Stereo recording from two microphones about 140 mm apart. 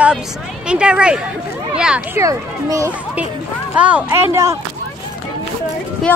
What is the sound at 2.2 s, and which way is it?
Speech, 25° right (ahead or behind).